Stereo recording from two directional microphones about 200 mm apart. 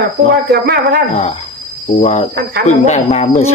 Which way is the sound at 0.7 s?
50° right (ahead or behind).